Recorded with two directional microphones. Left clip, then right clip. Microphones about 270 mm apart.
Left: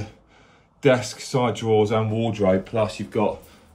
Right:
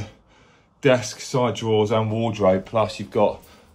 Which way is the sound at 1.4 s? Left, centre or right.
Centre.